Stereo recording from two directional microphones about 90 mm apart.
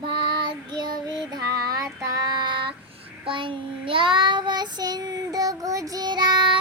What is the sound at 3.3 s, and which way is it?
Child singing, 70° right (ahead or behind).